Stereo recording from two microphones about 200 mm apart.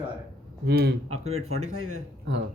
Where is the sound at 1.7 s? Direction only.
90° right.